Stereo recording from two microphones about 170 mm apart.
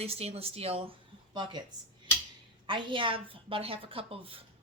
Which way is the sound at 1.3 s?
25° right (ahead or behind).